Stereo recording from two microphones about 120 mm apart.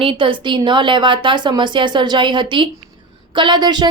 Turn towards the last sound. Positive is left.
turn(degrees=-35)  # may be behind; listen again after turning